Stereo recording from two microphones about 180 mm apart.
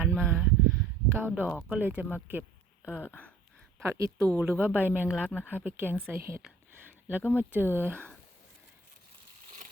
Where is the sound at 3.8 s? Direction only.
15° right (ahead or behind).